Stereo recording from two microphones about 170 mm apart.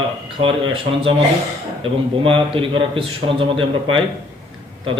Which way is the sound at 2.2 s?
30° right (ahead or behind).